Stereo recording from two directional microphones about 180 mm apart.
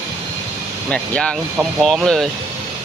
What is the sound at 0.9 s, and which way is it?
Speech, 5° left (ahead or behind).